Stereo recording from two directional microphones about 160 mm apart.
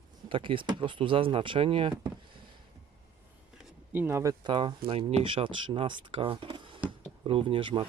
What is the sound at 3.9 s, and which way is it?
Speech, 15° right (ahead or behind).